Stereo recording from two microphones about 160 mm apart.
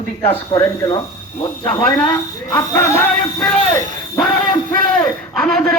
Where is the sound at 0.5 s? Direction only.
25° left (ahead or behind).